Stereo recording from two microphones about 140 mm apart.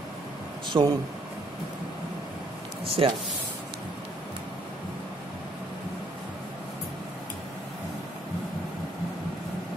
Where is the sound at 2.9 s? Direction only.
40° right (ahead or behind).